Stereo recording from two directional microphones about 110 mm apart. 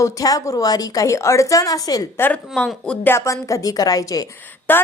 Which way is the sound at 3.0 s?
25° left (ahead or behind).